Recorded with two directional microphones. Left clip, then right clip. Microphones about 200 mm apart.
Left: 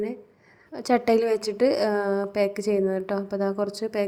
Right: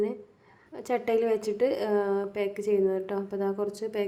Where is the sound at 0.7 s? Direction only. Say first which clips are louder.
Left 6 dB; 30° left (ahead or behind).